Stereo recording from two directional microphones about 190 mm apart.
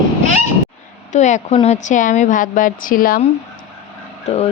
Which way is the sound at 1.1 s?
40° left (ahead or behind).